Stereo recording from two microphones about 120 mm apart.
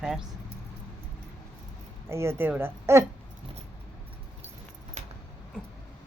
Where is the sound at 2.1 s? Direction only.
20° right (ahead or behind).